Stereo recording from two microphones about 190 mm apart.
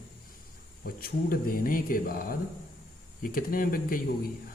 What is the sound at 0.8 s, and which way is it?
Speech, 50° left (ahead or behind).